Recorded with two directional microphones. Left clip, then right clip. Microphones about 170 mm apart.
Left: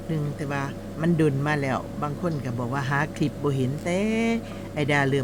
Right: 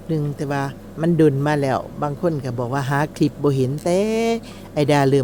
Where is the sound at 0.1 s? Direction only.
30° right (ahead or behind).